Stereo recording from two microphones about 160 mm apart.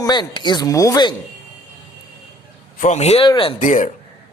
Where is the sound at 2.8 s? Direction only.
45° left (ahead or behind).